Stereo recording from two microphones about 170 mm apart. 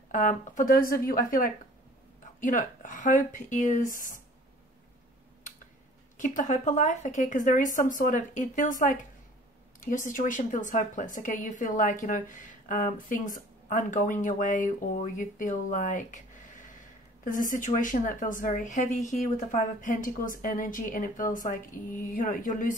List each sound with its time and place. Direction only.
0.1 s a woman's voice: 50° left (ahead or behind)
6.1 s a woman's voice: 50° left (ahead or behind)
17.2 s a woman's voice: 50° left (ahead or behind)